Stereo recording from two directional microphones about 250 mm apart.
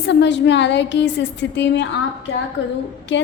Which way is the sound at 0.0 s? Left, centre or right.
Left.